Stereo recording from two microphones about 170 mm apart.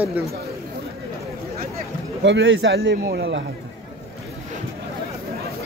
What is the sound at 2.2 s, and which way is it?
A man's voice, 90° right.